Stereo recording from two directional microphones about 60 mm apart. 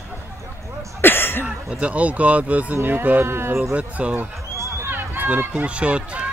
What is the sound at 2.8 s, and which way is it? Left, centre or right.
Speech, right.